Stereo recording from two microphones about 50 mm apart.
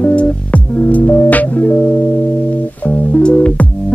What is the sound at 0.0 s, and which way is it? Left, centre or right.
Music, left.